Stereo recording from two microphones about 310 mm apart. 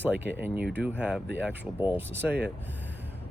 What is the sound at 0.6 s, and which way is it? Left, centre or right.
Speech, right.